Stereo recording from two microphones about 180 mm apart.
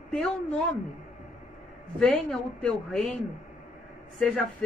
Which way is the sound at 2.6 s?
5° left (ahead or behind).